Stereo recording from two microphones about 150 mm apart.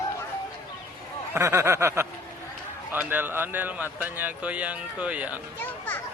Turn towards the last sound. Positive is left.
turn(degrees=10)  # may be behind; listen again after turning